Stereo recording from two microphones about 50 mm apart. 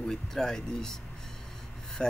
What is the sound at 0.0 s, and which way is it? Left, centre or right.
Speech, centre.